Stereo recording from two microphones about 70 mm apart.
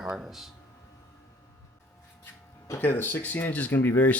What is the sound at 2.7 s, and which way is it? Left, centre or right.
Speech, left.